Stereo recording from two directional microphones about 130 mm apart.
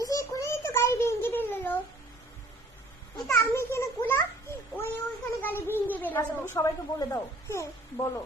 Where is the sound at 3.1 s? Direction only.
20° left (ahead or behind).